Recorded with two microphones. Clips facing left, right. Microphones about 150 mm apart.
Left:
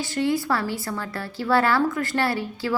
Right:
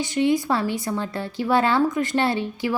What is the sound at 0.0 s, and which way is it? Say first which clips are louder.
A woman's voice: right 3 dB; 20° right (ahead or behind).